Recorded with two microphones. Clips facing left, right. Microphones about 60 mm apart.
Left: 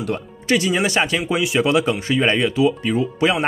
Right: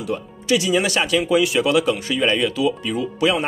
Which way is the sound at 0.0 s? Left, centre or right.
Left.